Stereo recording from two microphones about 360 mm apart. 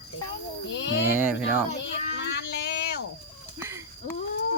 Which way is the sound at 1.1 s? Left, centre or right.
Centre.